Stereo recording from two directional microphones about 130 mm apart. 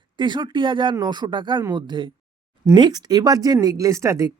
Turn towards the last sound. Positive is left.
turn(degrees=-25)  # may be behind; listen again after turning